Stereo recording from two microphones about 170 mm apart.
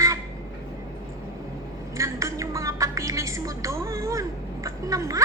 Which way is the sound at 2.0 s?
20° right (ahead or behind).